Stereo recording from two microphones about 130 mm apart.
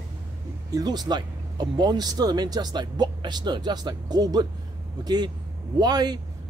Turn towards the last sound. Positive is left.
turn(degrees=-30)  # may be behind; listen again after turning